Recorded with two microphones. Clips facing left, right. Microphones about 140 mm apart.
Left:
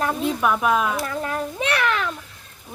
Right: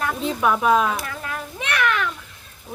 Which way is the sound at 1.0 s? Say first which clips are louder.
Left 5 dB; 30° left (ahead or behind).